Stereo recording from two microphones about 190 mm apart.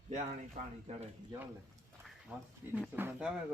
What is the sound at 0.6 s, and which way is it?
Speech, 45° right (ahead or behind).